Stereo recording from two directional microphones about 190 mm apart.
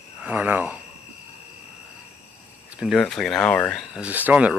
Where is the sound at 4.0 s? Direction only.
10° right (ahead or behind).